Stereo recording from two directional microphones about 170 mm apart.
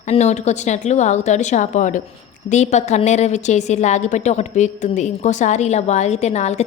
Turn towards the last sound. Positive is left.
turn(degrees=40)  # may be behind; listen again after turning